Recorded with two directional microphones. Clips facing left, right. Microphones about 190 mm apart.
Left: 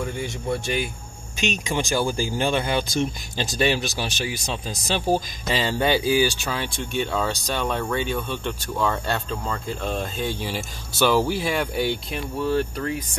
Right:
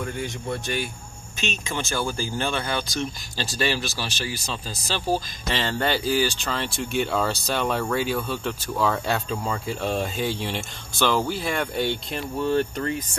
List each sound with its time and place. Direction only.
0.0 s speech: 5° left (ahead or behind)